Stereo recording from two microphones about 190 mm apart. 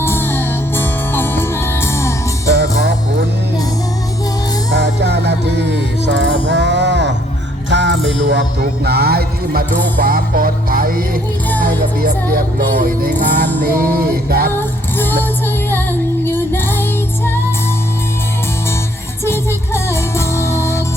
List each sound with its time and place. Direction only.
0.0 s music: 10° left (ahead or behind)
2.5 s music: 60° right (ahead or behind)
4.7 s music: 60° right (ahead or behind)
14.9 s music: 10° left (ahead or behind)
19.2 s music: 15° left (ahead or behind)